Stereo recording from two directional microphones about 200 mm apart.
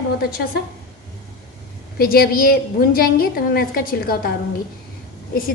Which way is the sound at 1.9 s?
50° left (ahead or behind).